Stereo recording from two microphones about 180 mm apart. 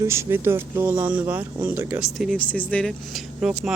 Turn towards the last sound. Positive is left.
turn(degrees=0)  # may be behind; listen again after turning